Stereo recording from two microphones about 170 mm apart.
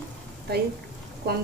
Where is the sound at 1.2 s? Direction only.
65° right (ahead or behind).